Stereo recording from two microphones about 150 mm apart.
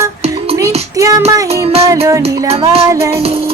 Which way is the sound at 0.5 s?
20° right (ahead or behind).